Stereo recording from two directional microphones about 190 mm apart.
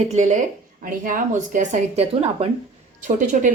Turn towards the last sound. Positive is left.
turn(degrees=-40)  # may be behind; listen again after turning